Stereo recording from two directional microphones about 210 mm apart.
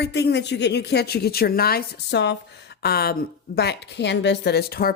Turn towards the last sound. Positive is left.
turn(degrees=45)  # may be behind; listen again after turning